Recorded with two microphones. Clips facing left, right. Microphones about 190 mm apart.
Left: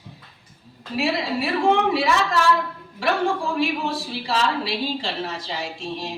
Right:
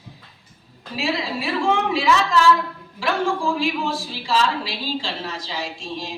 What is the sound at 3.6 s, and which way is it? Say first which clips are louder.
A woman's voice: even; 60° left (ahead or behind).